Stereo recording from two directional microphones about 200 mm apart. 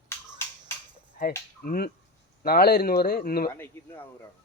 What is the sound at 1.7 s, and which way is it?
Speech, 50° left (ahead or behind).